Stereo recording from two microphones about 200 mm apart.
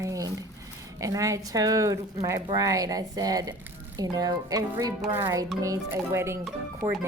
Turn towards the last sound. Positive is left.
turn(degrees=-10)  # may be behind; listen again after turning